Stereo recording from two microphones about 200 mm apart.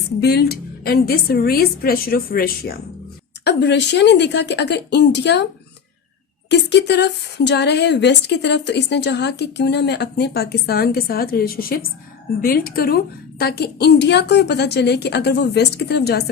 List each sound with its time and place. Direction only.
0.2 s a woman's voice: 55° left (ahead or behind)
3.4 s speech: 60° left (ahead or behind)
6.5 s a woman's voice: 60° left (ahead or behind)